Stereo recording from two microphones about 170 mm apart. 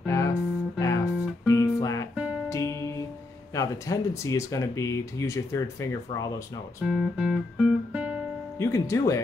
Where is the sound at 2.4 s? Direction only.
20° left (ahead or behind).